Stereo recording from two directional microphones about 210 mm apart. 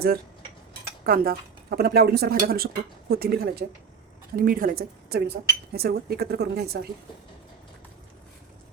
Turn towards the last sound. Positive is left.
turn(degrees=-50)  # may be behind; listen again after turning